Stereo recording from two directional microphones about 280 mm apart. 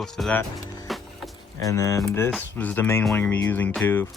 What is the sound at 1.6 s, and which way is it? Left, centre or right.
Speech, centre.